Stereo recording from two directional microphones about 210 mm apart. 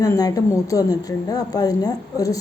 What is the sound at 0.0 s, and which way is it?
A woman's voice, 15° left (ahead or behind).